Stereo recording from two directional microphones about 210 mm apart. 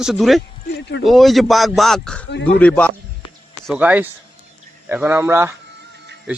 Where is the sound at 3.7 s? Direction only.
5° right (ahead or behind).